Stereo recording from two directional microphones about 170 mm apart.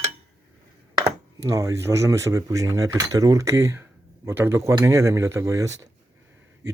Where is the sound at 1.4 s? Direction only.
20° right (ahead or behind).